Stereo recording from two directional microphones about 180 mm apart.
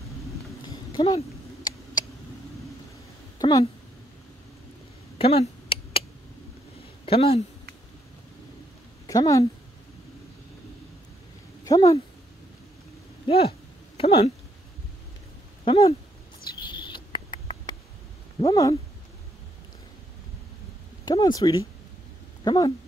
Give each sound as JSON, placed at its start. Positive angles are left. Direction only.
{"t": 0.9, "sound": "cat", "side_deg": 25}
{"t": 3.3, "sound": "a sound", "side_deg": 20}
{"t": 5.2, "sound": "a sound", "side_deg": 35}
{"t": 7.1, "sound": "speech", "side_deg": 30}
{"t": 9.0, "sound": "a woman's voice", "side_deg": 20}
{"t": 11.6, "sound": "speech", "side_deg": 20}
{"t": 13.3, "sound": "speech", "side_deg": 30}
{"t": 15.7, "sound": "speech", "side_deg": 25}
{"t": 16.5, "sound": "rodents", "side_deg": 25}
{"t": 18.4, "sound": "speech", "side_deg": 20}
{"t": 21.0, "sound": "speech", "side_deg": 20}